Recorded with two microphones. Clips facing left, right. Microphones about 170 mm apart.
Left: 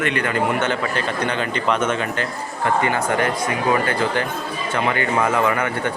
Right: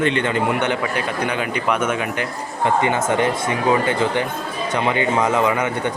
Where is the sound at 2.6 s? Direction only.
20° right (ahead or behind).